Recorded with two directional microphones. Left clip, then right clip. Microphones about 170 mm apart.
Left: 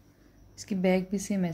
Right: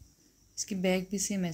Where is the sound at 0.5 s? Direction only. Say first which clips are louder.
Left 3 dB; 10° right (ahead or behind).